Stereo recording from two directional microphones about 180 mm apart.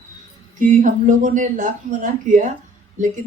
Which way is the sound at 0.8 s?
45° right (ahead or behind).